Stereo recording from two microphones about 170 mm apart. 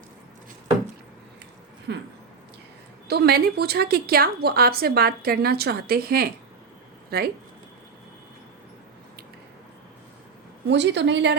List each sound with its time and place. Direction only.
1.9 s a woman's voice: 90° right
3.1 s a woman's voice: 70° right (ahead or behind)
10.7 s a woman's voice: 90° right